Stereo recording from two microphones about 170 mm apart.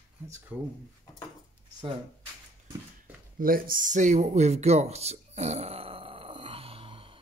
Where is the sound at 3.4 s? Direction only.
55° right (ahead or behind).